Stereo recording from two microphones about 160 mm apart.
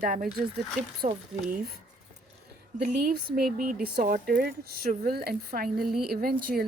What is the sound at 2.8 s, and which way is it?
Speech, 75° right (ahead or behind).